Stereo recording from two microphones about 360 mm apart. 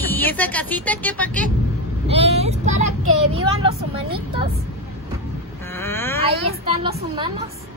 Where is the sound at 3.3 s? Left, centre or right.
Centre.